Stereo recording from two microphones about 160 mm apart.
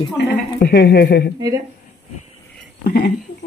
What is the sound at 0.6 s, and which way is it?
Speech, 80° left.